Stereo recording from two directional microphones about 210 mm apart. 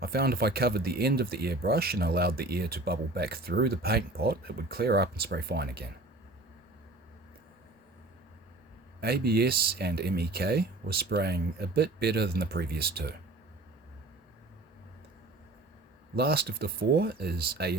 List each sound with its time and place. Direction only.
0.0 s speech: 45° right (ahead or behind)
9.0 s speech: 50° right (ahead or behind)
16.1 s speech: 50° right (ahead or behind)